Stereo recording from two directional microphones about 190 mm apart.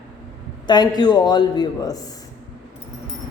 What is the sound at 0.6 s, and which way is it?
A man's voice, 20° left (ahead or behind).